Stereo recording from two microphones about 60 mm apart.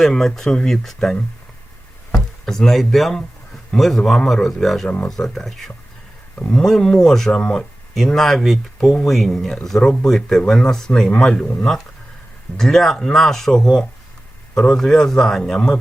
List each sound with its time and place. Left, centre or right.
0.0 s speech: centre
2.1 s speech: centre